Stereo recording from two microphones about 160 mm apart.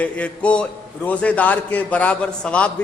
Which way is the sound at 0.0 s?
10° left (ahead or behind).